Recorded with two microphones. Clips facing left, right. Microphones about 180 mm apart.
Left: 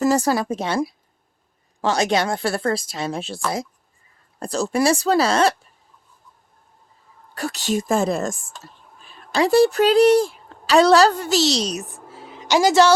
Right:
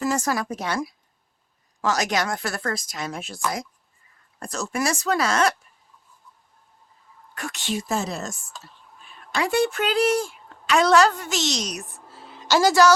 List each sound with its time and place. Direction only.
0.0 s speech: 35° left (ahead or behind)
7.3 s a woman's voice: 35° left (ahead or behind)
9.0 s a woman's voice: 35° left (ahead or behind)
12.1 s a sound: 15° left (ahead or behind)